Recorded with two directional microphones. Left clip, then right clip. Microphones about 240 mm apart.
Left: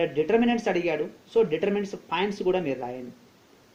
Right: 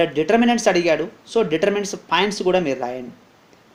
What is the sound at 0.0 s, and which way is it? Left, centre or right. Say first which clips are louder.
Speech: right 6 dB; right.